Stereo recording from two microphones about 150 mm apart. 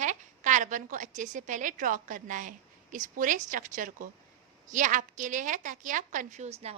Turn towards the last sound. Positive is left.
turn(degrees=-45)  # may be behind; listen again after turning